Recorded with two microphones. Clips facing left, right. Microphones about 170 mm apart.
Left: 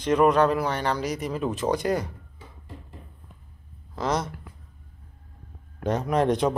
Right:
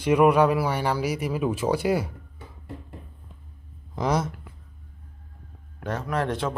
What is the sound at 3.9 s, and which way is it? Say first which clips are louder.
Speech: right 2 dB; 10° right (ahead or behind).